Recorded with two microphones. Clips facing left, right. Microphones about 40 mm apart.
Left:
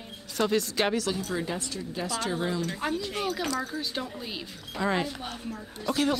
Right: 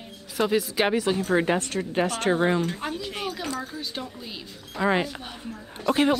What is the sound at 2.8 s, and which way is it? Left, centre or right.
Speech, centre.